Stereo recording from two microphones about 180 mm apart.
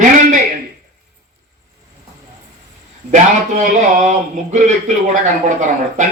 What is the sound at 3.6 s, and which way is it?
Speech, 40° right (ahead or behind).